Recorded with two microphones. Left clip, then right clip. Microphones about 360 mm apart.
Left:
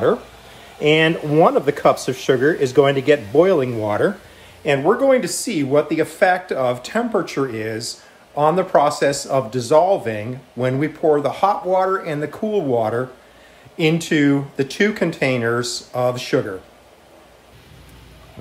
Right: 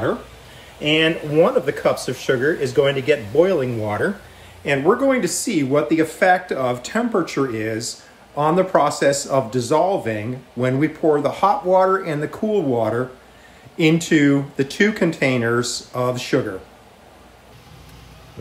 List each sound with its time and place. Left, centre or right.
0.8 s speech: centre
4.6 s speech: centre